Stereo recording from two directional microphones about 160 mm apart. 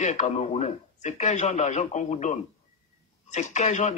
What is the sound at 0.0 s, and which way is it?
Speech, 45° left (ahead or behind).